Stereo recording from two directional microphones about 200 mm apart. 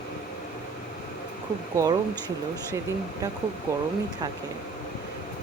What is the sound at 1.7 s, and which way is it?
Speech, 20° right (ahead or behind).